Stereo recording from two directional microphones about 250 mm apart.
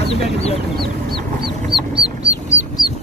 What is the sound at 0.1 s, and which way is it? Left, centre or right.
Speech, left.